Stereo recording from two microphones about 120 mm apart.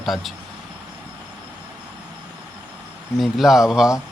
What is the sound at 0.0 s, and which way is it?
Speech, centre (ahead or behind).